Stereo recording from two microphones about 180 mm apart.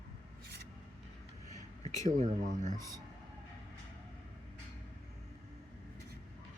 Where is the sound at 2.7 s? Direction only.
20° right (ahead or behind).